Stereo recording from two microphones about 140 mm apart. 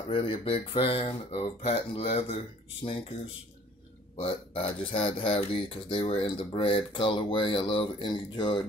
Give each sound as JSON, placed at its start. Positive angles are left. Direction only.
{"t": 0.1, "sound": "speech", "side_deg": 40}
{"t": 4.2, "sound": "speech", "side_deg": 45}